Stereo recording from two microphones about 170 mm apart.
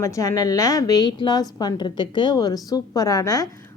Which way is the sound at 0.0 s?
20° left (ahead or behind).